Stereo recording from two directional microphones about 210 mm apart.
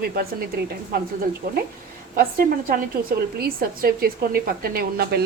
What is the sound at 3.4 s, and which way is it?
Speech, 45° right (ahead or behind).